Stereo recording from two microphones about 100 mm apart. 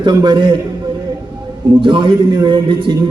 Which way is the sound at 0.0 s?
50° right (ahead or behind).